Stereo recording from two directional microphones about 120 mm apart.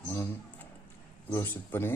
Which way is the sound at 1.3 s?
20° left (ahead or behind).